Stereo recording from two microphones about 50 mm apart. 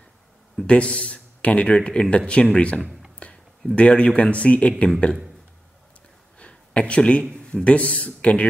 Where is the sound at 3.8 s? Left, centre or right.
Left.